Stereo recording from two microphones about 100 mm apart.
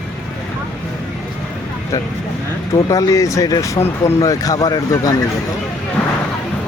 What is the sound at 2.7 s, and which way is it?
Speech, 35° left (ahead or behind).